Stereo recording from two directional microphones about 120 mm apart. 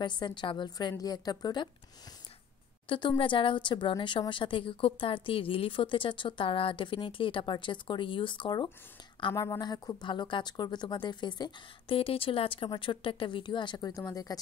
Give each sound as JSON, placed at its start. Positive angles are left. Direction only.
{"t": 0.0, "sound": "speech", "side_deg": 40}
{"t": 2.9, "sound": "a woman's voice", "side_deg": 45}
{"t": 9.3, "sound": "speech", "side_deg": 25}
{"t": 9.6, "sound": "speech", "side_deg": 35}